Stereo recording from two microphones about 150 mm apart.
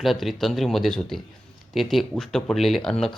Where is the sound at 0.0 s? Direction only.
Centre (ahead or behind).